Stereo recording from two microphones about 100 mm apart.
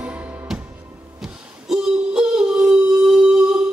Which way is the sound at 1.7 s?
5° right (ahead or behind).